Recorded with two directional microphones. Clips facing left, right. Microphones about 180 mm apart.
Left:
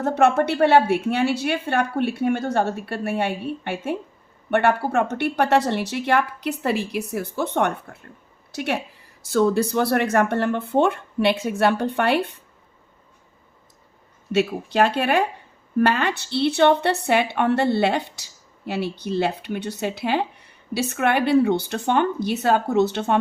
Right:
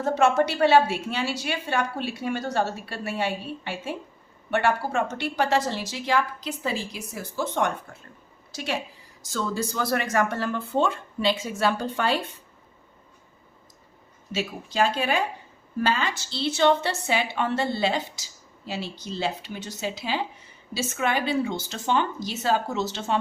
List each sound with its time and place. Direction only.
0.0 s a woman's voice: 60° left (ahead or behind)
14.3 s a woman's voice: 65° left (ahead or behind)